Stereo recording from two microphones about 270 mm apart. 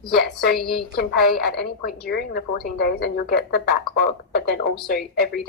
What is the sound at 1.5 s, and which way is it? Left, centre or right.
A woman's voice, left.